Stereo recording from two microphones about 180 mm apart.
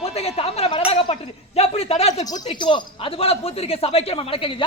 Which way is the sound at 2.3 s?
25° left (ahead or behind).